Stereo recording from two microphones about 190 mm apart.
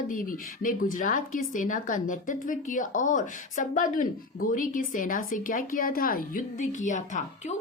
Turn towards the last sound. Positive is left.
turn(degrees=40)  # may be behind; listen again after turning